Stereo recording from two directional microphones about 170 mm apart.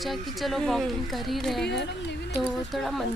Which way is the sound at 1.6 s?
90° left.